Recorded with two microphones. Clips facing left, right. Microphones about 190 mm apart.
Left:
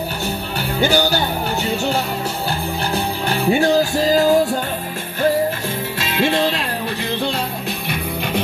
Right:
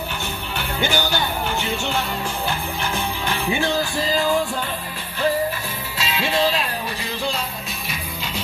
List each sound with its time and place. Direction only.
0.6 s music: 40° left (ahead or behind)
5.9 s music: 55° left (ahead or behind)
7.9 s music: 60° left (ahead or behind)